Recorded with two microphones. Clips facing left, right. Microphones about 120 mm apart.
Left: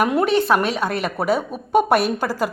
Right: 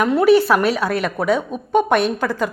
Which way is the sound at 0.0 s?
10° left (ahead or behind).